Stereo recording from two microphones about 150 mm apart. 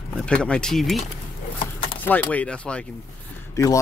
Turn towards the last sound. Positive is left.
turn(degrees=20)  # may be behind; listen again after turning